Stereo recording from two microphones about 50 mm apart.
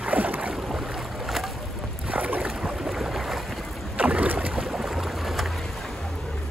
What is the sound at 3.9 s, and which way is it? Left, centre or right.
Boat, right.